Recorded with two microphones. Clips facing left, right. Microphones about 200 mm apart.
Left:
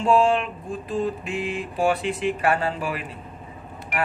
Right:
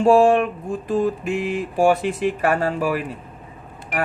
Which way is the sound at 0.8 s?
45° right (ahead or behind).